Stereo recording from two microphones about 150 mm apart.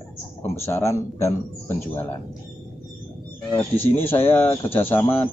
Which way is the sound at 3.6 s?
15° left (ahead or behind).